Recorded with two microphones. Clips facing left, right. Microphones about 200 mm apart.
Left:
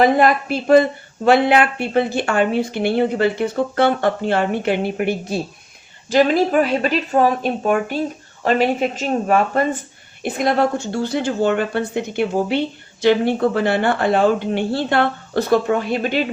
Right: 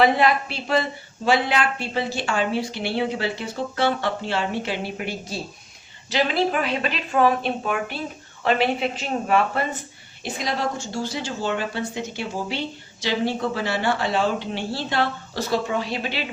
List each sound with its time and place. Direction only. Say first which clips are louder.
0.0 s a woman's voice: left 4 dB; 45° left (ahead or behind)
6.1 s a woman's voice: left 7 dB; 45° left (ahead or behind)
10.2 s speech: left 8 dB; 55° left (ahead or behind)